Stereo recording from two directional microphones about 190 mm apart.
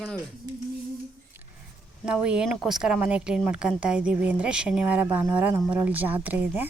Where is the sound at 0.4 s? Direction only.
20° right (ahead or behind).